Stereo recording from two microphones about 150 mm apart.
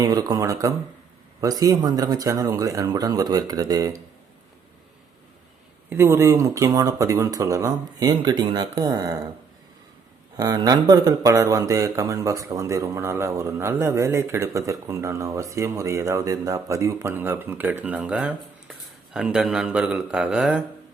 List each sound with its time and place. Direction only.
0.0 s speech: 25° right (ahead or behind)
5.9 s speech: 15° right (ahead or behind)
10.3 s speech: 25° right (ahead or behind); by 20.7 s 5° right (ahead or behind)